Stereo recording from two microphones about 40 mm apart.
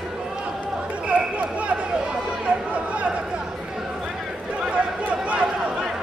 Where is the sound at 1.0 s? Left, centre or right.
Right.